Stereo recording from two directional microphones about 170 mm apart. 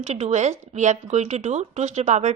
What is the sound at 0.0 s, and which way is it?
Speech, 40° right (ahead or behind).